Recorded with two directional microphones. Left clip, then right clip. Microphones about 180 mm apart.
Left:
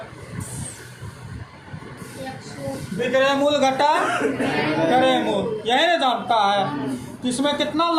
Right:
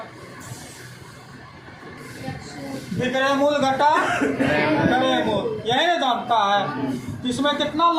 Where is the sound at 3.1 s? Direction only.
30° left (ahead or behind).